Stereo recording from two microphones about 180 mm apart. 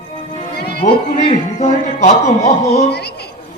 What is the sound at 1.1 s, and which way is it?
A man's voice, 40° left (ahead or behind).